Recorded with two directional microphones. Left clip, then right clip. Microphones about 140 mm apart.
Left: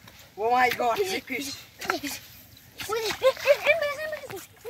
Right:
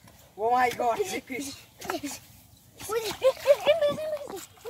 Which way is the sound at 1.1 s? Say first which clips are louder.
Left 3 dB; 15° right (ahead or behind).